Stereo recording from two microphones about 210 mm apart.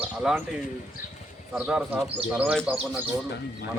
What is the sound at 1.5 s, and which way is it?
Speech, 5° right (ahead or behind).